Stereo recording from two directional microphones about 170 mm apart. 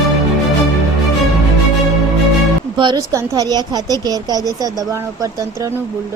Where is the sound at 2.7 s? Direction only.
25° right (ahead or behind).